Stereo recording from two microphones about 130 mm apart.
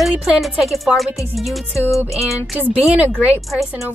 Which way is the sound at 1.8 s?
20° left (ahead or behind).